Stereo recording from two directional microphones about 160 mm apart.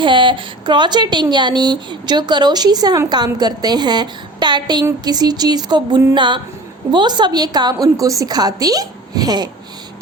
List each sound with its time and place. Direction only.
0.0 s speech: 30° right (ahead or behind)